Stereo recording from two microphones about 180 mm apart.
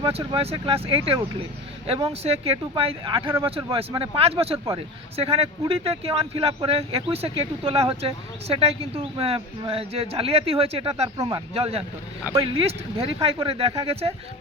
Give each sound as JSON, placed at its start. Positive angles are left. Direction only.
{"t": 0.0, "sound": "speech", "side_deg": -30}
{"t": 11.2, "sound": "speech", "side_deg": -20}
{"t": 11.5, "sound": "speech", "side_deg": -35}